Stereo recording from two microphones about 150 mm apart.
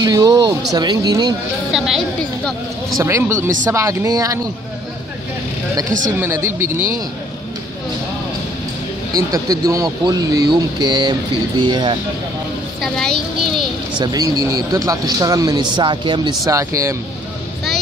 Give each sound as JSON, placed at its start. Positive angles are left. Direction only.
{"t": 0.0, "sound": "speech", "side_deg": -25}
{"t": 1.7, "sound": "a child's voice", "side_deg": 0}
{"t": 3.0, "sound": "speech", "side_deg": -20}
{"t": 6.3, "sound": "speech", "side_deg": -15}
{"t": 9.1, "sound": "speech", "side_deg": -25}
{"t": 12.8, "sound": "a child's voice", "side_deg": 0}
{"t": 13.9, "sound": "speech", "side_deg": -30}